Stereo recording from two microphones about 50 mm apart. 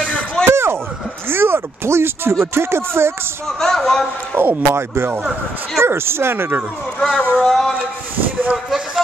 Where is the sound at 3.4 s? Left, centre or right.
Centre.